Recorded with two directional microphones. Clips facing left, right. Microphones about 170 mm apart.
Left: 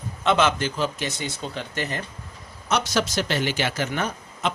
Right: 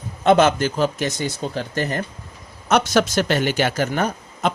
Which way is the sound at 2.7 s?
55° right (ahead or behind).